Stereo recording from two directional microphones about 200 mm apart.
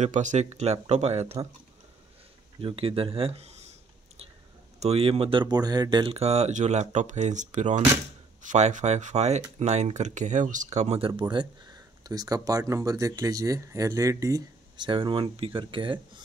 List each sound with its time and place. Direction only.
0.0 s speech: 35° right (ahead or behind)
2.6 s speech: 30° right (ahead or behind)
4.7 s speech: 30° right (ahead or behind)